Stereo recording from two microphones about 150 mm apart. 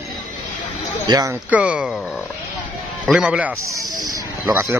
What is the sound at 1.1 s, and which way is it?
Speech, 25° right (ahead or behind).